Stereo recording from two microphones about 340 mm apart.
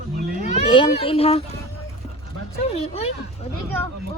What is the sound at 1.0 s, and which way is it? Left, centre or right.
Speech, centre.